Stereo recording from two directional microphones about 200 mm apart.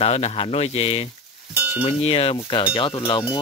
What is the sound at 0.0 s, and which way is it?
Speech, 30° left (ahead or behind).